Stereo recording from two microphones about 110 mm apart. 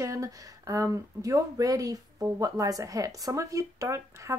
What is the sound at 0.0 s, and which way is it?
A woman's voice, 30° right (ahead or behind).